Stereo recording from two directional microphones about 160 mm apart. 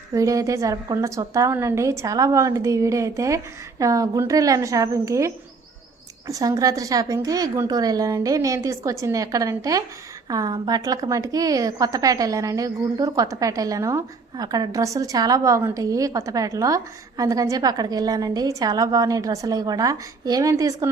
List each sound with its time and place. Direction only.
0.1 s a woman's voice: 20° right (ahead or behind)